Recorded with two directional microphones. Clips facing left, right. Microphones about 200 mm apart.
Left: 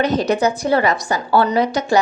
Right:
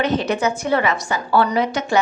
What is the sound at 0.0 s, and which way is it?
A woman's voice, 40° left (ahead or behind).